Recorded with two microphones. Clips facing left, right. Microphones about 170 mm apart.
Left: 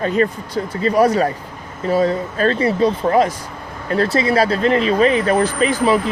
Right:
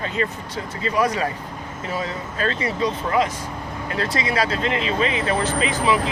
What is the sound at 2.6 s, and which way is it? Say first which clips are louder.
Speech: left 7 dB; 30° left (ahead or behind).